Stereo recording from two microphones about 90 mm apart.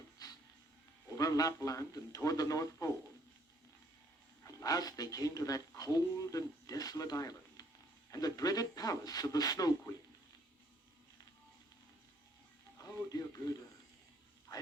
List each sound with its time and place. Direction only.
0.2 s music: 45° left (ahead or behind)
1.1 s speech: 40° left (ahead or behind)
4.6 s a man's voice: 45° left (ahead or behind)
12.8 s music: 40° left (ahead or behind)